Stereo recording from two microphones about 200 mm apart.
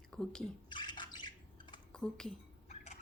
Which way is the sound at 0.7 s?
25° left (ahead or behind).